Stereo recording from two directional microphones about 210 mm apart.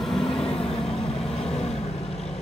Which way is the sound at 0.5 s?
25° left (ahead or behind).